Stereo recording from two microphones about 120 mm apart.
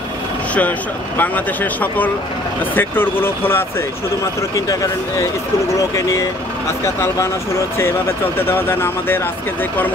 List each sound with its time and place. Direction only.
0.6 s speech: 15° left (ahead or behind)
4.4 s speech: 30° left (ahead or behind)
8.4 s speech: 20° left (ahead or behind)